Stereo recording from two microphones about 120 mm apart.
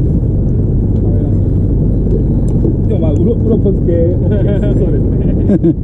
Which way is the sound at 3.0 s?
Centre (ahead or behind).